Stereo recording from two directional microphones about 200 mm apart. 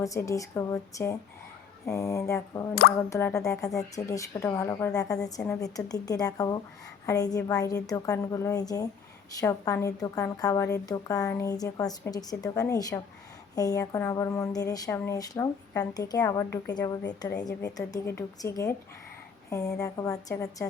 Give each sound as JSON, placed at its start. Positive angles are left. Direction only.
{"t": 0.0, "sound": "a woman's voice", "side_deg": 15}
{"t": 19.8, "sound": "a woman's voice", "side_deg": 15}